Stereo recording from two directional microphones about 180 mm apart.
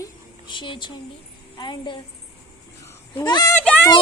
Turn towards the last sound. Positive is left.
turn(degrees=10)  # may be behind; listen again after turning